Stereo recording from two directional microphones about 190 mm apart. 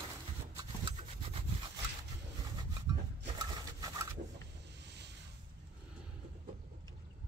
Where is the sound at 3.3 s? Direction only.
20° right (ahead or behind).